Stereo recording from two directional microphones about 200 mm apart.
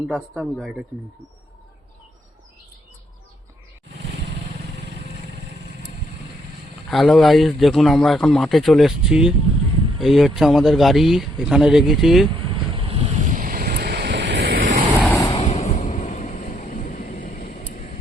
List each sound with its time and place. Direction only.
0.1 s speech: centre (ahead or behind)
6.9 s speech: centre (ahead or behind)
12.7 s vehicle: 30° right (ahead or behind)
15.1 s vehicle: 20° left (ahead or behind)